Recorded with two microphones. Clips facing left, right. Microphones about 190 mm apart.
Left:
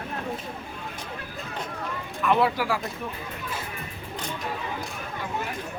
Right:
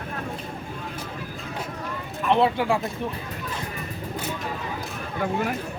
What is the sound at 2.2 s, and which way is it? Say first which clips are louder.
Speech: right 2 dB; 25° right (ahead or behind).